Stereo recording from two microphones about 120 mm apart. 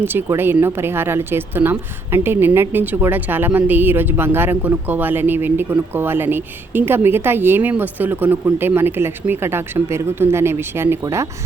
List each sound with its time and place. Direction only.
0.0 s speech: 15° right (ahead or behind)